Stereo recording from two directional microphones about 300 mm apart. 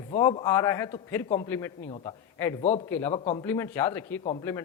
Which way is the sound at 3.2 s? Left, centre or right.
Centre.